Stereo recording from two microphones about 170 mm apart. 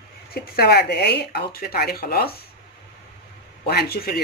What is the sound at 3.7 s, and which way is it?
Speech, 65° left (ahead or behind).